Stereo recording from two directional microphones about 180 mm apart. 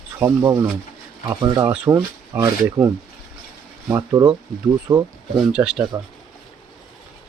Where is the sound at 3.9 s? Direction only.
15° right (ahead or behind).